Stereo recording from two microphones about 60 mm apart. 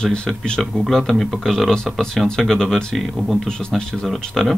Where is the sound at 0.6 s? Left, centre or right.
Centre.